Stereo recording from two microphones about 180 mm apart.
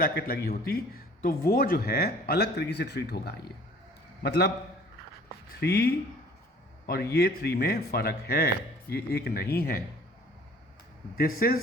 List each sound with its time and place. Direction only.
0.0 s speech: 55° left (ahead or behind)
5.5 s speech: 65° left (ahead or behind)
11.2 s speech: 55° left (ahead or behind)